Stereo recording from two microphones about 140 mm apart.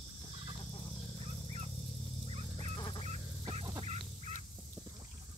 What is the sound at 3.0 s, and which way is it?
Dog, 50° right (ahead or behind).